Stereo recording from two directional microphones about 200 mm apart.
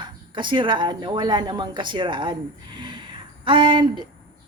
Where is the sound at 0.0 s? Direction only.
25° right (ahead or behind).